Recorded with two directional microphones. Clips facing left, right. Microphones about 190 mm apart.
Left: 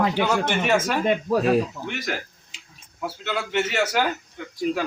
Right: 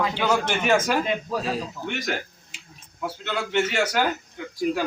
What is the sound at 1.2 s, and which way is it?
Speech, 60° left (ahead or behind).